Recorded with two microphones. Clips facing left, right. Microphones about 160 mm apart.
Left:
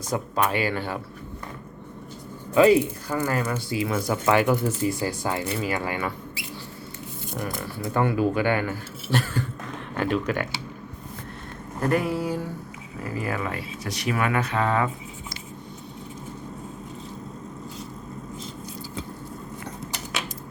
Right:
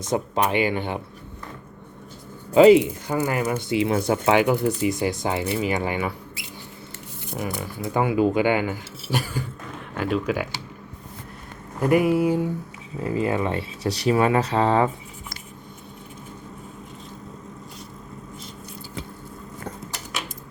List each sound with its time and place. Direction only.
0.0 s speech: 20° right (ahead or behind)
3.1 s speech: 15° right (ahead or behind)
4.4 s speech: 15° right (ahead or behind)
7.6 s speech: 10° right (ahead or behind)
11.8 s speech: 10° right (ahead or behind); by 14.8 s 30° right (ahead or behind)